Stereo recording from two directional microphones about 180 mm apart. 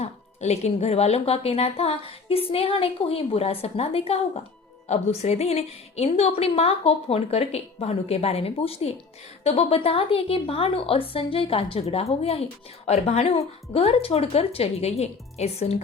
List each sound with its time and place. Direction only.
0.0 s a woman's voice: 35° left (ahead or behind)